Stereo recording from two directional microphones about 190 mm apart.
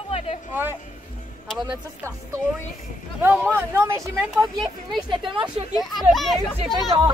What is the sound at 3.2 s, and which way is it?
Speech, 10° right (ahead or behind).